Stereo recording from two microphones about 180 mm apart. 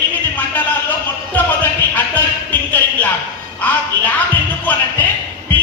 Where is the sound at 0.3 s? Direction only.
10° left (ahead or behind).